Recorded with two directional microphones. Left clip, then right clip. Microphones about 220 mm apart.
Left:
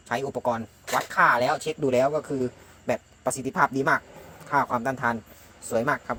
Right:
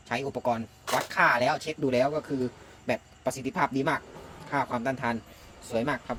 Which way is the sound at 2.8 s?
5° left (ahead or behind).